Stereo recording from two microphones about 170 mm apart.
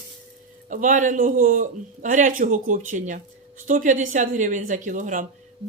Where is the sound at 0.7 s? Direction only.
50° right (ahead or behind).